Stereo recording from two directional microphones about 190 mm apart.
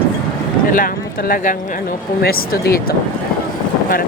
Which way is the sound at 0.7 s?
45° left (ahead or behind).